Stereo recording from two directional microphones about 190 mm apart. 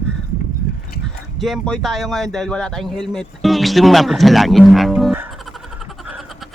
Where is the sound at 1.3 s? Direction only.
Centre (ahead or behind).